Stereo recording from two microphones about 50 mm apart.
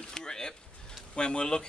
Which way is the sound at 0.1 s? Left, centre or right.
Centre.